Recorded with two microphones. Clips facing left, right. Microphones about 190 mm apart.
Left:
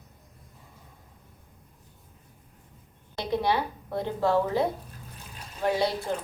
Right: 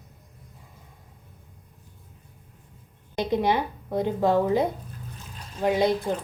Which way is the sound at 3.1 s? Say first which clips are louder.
Right 3 dB; 15° right (ahead or behind).